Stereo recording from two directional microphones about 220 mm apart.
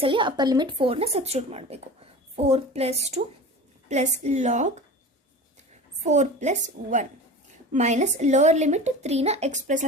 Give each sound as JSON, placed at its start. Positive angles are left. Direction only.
{"t": 0.0, "sound": "a woman's voice", "side_deg": -20}
{"t": 6.1, "sound": "a woman's voice", "side_deg": -30}